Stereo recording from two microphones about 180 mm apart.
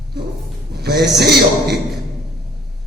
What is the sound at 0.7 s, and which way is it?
A man's voice, 60° right (ahead or behind).